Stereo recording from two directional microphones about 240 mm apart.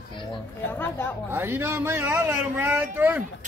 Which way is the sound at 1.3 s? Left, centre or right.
Centre.